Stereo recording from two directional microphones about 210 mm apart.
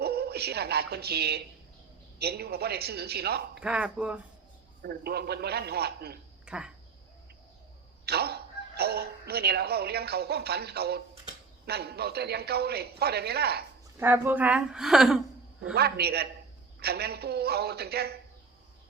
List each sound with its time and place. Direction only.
0.0 s a man's voice: 50° right (ahead or behind)
3.6 s a woman's voice: 5° right (ahead or behind)
4.8 s a man's voice: 50° right (ahead or behind)
6.4 s a sound: 5° right (ahead or behind)
8.0 s a sound: 50° right (ahead or behind)
11.6 s a man's voice: 50° right (ahead or behind)
13.9 s a woman's voice: 10° right (ahead or behind)
15.7 s a man's voice: 50° right (ahead or behind)